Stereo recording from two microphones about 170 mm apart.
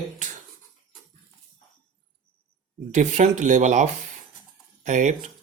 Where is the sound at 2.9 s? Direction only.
45° right (ahead or behind).